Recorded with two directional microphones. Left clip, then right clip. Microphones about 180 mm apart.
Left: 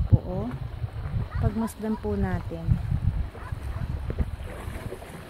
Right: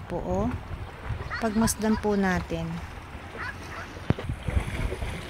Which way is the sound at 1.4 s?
Centre (ahead or behind).